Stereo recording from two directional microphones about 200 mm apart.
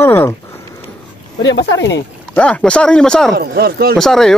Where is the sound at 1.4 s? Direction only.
60° left (ahead or behind).